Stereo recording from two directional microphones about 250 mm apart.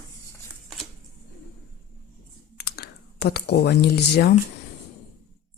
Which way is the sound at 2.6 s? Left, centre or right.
Left.